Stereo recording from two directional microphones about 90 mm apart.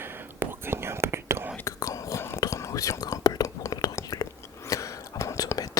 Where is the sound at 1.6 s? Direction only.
35° left (ahead or behind).